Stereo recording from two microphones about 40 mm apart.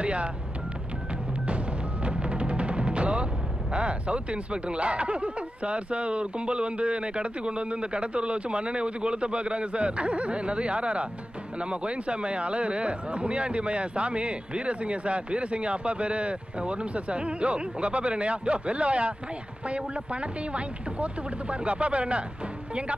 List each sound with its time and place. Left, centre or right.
0.0 s speech: right
2.0 s timpani: right
3.7 s speech: right